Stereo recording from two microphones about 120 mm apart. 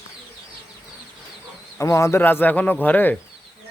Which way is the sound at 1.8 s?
25° left (ahead or behind).